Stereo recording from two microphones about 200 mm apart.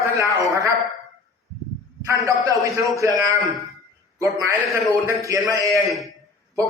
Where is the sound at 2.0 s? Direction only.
15° right (ahead or behind).